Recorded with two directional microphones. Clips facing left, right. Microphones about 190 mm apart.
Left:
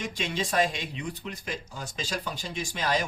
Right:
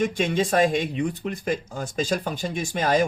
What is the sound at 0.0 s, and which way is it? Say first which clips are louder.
Speech: right 9 dB; 50° right (ahead or behind).